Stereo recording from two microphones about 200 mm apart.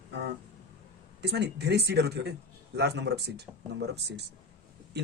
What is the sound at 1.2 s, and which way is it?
Speech, 55° right (ahead or behind).